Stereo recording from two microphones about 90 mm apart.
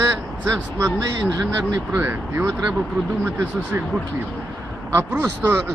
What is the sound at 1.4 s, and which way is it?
Speech, 30° right (ahead or behind).